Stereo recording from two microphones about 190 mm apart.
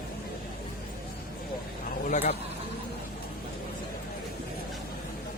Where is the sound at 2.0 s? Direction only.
40° left (ahead or behind).